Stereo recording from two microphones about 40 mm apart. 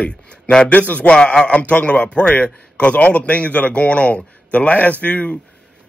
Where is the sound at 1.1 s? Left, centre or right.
Left.